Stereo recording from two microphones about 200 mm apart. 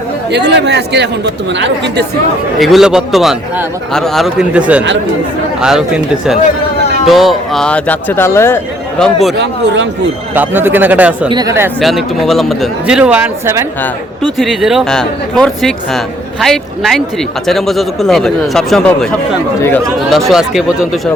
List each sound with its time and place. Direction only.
0.3 s speech: 60° right (ahead or behind)
2.6 s speech: centre (ahead or behind)
10.3 s speech: 10° right (ahead or behind)
11.3 s speech: 20° right (ahead or behind)
11.8 s speech: centre (ahead or behind)
14.3 s speech: centre (ahead or behind)
20.1 s speech: centre (ahead or behind)